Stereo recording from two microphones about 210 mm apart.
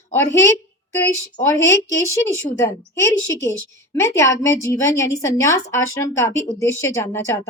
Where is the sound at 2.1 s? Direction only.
15° left (ahead or behind).